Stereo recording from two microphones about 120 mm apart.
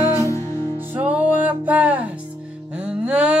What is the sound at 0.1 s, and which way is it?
Music, 25° left (ahead or behind).